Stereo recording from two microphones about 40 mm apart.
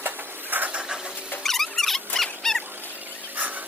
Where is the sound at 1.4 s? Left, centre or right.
Centre.